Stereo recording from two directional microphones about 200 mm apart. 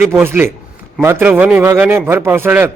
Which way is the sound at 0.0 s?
10° right (ahead or behind).